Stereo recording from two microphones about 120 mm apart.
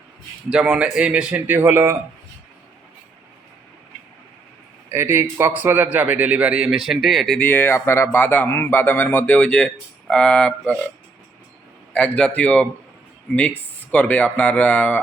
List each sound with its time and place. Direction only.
0.5 s a man's voice: 10° right (ahead or behind)
4.9 s a man's voice: 20° right (ahead or behind); by 7.3 s centre (ahead or behind)
7.3 s speech: 15° left (ahead or behind)
11.9 s speech: 10° left (ahead or behind)
13.9 s speech: 10° left (ahead or behind)